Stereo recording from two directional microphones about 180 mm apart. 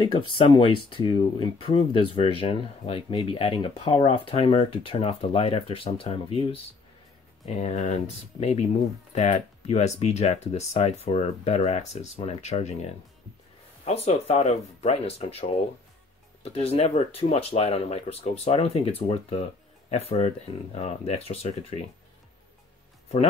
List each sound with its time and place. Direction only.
0.0 s speech: 25° left (ahead or behind)
13.8 s speech: 35° left (ahead or behind)